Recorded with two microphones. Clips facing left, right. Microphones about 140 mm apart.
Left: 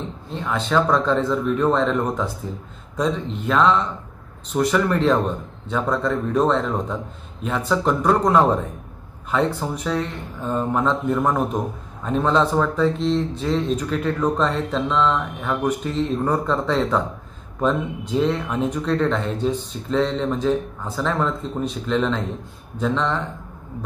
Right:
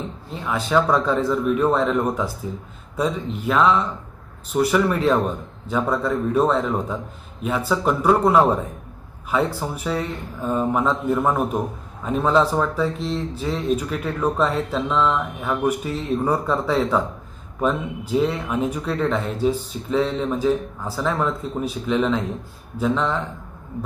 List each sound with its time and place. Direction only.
0.3 s speech: 5° right (ahead or behind)